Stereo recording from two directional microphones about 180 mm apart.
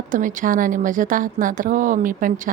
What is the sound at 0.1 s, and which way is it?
A woman's voice, 45° right (ahead or behind).